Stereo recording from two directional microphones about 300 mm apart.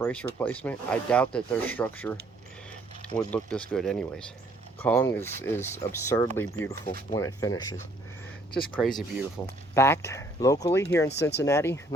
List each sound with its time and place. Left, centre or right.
0.0 s speech: centre
3.2 s speech: centre
8.7 s speech: centre
11.1 s speech: left
11.4 s speech: centre